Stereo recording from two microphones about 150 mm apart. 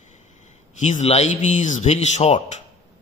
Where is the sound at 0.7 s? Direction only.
55° left (ahead or behind).